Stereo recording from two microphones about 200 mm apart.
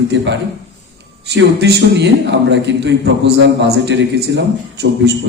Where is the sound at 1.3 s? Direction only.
55° right (ahead or behind).